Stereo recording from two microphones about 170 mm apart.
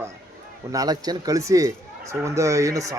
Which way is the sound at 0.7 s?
20° right (ahead or behind).